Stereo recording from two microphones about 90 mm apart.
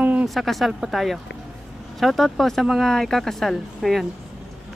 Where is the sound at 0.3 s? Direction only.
Centre (ahead or behind).